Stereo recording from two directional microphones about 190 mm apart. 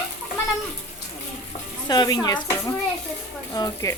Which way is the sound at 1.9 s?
20° left (ahead or behind).